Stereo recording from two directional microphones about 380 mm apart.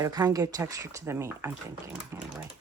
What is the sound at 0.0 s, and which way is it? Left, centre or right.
Speech, centre.